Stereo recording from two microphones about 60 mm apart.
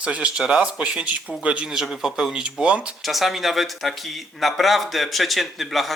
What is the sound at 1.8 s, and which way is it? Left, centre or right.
Speech, centre.